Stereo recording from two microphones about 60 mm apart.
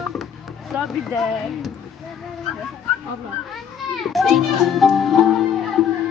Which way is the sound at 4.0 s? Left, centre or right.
Centre.